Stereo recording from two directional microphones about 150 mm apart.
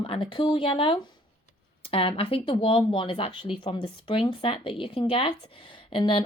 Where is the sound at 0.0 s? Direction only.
35° left (ahead or behind).